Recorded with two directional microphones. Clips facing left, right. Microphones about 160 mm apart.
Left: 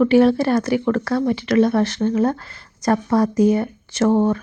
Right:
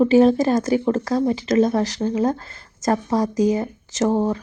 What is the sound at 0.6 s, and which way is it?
A woman's voice, 35° right (ahead or behind).